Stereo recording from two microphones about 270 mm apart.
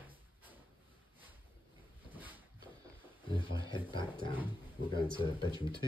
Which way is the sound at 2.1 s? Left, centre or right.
Centre.